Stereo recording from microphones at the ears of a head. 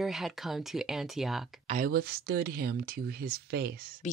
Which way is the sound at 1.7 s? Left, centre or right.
Right.